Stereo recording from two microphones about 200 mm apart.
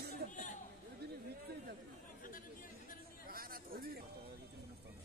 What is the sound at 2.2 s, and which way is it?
Chatter, 45° left (ahead or behind).